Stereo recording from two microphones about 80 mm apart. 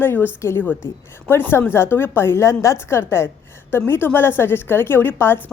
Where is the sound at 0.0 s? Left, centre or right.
Left.